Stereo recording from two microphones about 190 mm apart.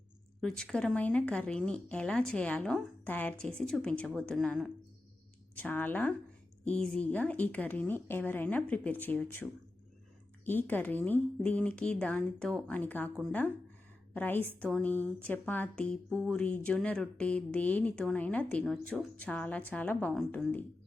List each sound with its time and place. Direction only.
0.4 s speech: 5° left (ahead or behind)
14.1 s speech: 10° left (ahead or behind)